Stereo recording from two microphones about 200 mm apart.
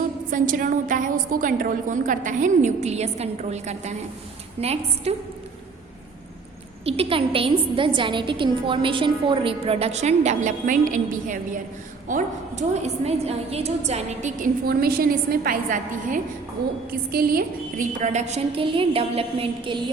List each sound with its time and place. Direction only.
0.3 s a woman's voice: 40° right (ahead or behind)
6.8 s a woman's voice: 30° right (ahead or behind)